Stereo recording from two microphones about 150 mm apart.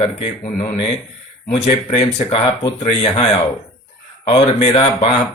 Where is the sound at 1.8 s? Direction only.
35° left (ahead or behind).